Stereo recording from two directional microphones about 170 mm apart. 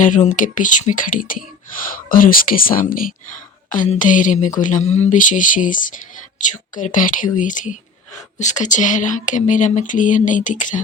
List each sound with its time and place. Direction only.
0.0 s speech: 45° left (ahead or behind)